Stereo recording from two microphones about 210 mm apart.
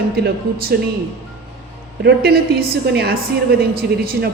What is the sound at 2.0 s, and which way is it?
A man's voice, 50° right (ahead or behind).